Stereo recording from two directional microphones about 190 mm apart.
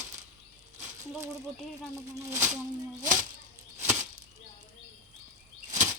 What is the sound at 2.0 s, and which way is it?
Speech, 15° right (ahead or behind).